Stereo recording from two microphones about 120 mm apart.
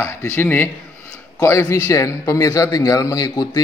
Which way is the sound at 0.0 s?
20° left (ahead or behind).